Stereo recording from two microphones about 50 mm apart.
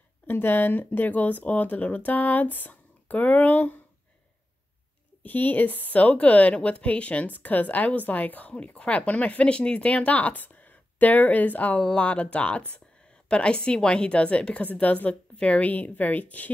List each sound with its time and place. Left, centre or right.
0.3 s speech: left
5.2 s speech: left